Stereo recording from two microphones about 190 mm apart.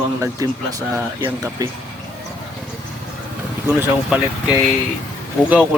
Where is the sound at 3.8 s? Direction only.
5° right (ahead or behind).